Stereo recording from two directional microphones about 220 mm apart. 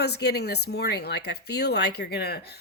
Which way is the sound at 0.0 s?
50° left (ahead or behind).